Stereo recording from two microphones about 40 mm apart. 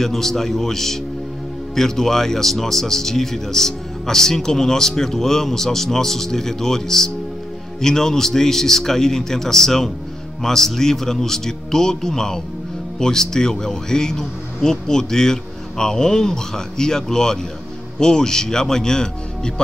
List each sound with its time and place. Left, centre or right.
0.0 s speech: centre